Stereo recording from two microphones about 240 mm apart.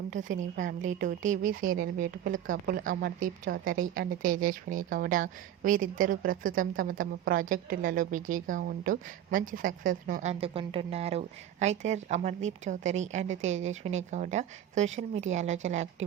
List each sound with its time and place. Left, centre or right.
0.1 s a woman's voice: right